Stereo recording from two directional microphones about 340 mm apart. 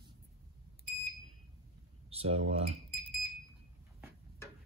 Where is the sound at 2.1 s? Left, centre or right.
Centre.